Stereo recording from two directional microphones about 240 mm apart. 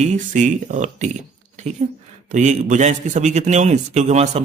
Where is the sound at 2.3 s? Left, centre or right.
Right.